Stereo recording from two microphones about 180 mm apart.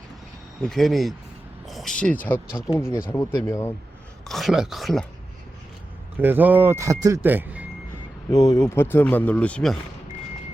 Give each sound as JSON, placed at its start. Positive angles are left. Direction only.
{"t": 0.7, "sound": "speech", "side_deg": 0}
{"t": 4.3, "sound": "speech", "side_deg": 0}
{"t": 6.1, "sound": "speech", "side_deg": -10}
{"t": 8.3, "sound": "speech", "side_deg": 20}